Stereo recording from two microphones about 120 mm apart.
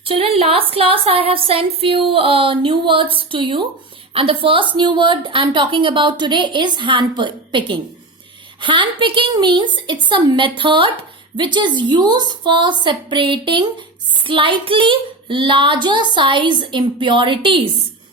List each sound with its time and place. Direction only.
0.0 s a woman's voice: 50° right (ahead or behind)